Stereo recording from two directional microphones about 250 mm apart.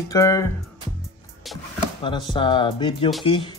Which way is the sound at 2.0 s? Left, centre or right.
Centre.